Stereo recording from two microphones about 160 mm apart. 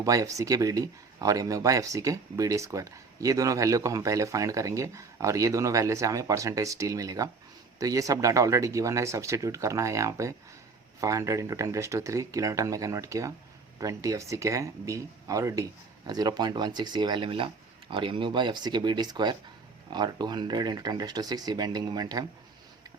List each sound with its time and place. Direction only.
0.0 s speech: 20° right (ahead or behind)